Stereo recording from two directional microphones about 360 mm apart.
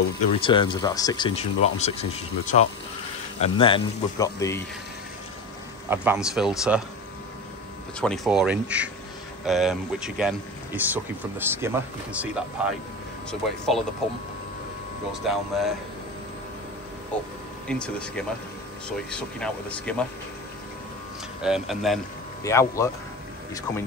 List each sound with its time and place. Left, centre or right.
0.3 s speech: centre
5.9 s speech: centre
8.0 s speech: centre
15.2 s speech: centre
17.6 s speech: centre
21.4 s a man's voice: centre